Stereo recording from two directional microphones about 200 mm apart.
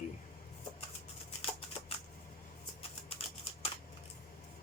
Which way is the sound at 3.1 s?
30° left (ahead or behind).